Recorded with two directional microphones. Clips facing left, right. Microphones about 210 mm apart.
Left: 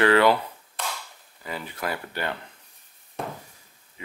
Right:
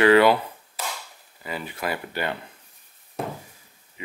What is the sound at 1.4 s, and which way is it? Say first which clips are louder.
Speech: right 2 dB; 10° right (ahead or behind).